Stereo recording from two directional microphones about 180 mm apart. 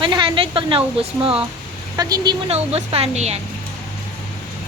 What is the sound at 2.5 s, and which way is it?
Speech, 35° right (ahead or behind).